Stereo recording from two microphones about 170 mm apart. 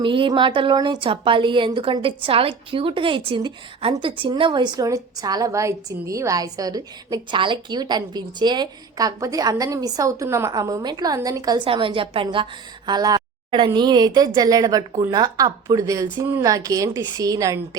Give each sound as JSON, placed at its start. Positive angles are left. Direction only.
{"t": 0.0, "sound": "a woman's voice", "side_deg": -30}